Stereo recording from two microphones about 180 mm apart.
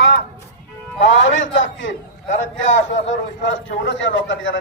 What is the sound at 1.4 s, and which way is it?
A man's voice, 90° left.